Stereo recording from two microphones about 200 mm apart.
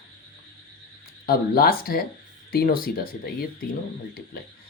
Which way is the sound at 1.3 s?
50° left (ahead or behind).